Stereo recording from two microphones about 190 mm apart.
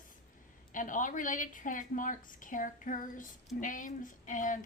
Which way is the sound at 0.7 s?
45° left (ahead or behind).